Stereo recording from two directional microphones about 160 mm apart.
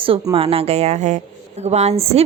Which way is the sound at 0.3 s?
35° right (ahead or behind).